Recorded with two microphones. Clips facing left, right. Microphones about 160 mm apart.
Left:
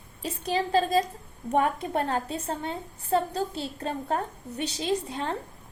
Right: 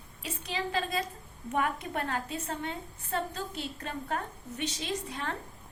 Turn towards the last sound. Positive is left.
turn(degrees=30)  # may be behind; listen again after turning